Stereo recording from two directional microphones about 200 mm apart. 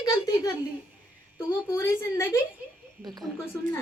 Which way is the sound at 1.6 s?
10° left (ahead or behind).